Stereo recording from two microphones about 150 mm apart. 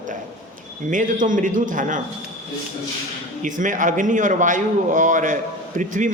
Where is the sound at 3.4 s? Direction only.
60° right (ahead or behind).